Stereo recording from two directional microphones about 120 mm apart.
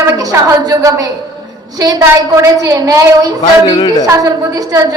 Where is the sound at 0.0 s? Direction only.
30° right (ahead or behind).